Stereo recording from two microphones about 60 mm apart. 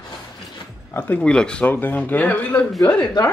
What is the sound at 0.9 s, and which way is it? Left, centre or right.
Speech, left.